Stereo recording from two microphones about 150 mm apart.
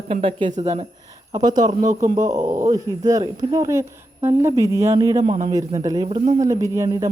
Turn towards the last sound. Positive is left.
turn(degrees=-20)  # may be behind; listen again after turning